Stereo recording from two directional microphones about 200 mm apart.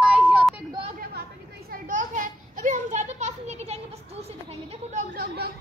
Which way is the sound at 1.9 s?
40° right (ahead or behind).